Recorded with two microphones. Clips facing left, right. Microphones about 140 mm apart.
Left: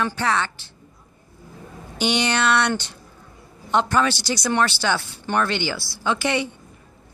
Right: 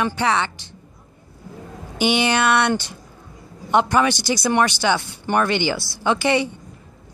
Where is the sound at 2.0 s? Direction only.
10° right (ahead or behind).